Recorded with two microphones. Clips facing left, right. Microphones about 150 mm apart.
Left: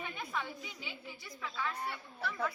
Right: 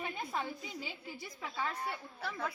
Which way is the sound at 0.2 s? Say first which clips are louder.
Right 2 dB; 35° right (ahead or behind).